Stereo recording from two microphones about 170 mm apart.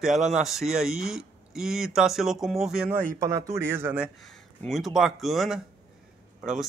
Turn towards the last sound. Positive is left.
turn(degrees=0)  # may be behind; listen again after turning